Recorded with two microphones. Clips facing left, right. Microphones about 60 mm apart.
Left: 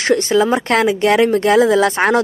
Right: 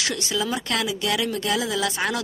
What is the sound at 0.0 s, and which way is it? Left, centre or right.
Speech, left.